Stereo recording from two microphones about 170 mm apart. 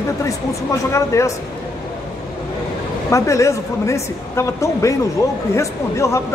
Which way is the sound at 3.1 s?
15° left (ahead or behind).